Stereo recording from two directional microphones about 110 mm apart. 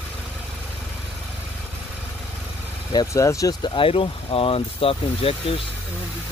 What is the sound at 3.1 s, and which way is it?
Speech, 30° left (ahead or behind).